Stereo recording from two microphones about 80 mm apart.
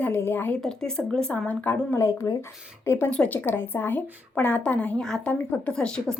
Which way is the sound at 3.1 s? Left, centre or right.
Centre.